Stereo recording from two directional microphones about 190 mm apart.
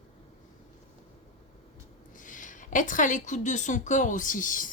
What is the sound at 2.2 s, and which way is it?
A woman's voice, 45° left (ahead or behind).